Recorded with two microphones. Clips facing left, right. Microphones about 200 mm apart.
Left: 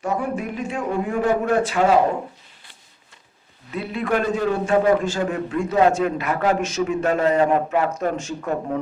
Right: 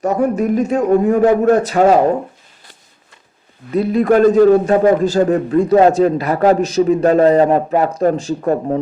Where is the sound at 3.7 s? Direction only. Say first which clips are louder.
Right 10 dB; 40° right (ahead or behind).